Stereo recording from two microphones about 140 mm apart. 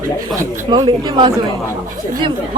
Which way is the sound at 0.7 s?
35° right (ahead or behind).